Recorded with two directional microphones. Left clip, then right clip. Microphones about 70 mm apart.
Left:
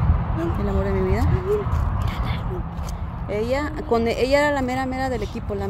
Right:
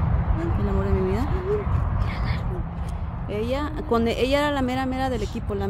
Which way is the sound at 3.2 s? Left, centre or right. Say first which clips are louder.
Left 3 dB; right.